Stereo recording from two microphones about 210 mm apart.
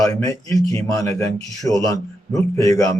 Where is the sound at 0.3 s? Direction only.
15° left (ahead or behind).